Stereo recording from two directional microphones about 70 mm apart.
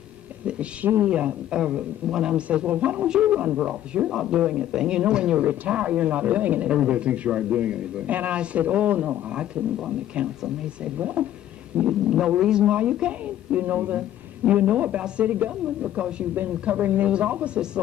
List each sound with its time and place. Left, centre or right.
0.8 s speech: right
9.3 s speech: centre